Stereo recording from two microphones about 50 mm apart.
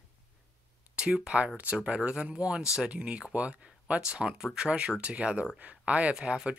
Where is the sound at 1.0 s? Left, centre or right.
Centre.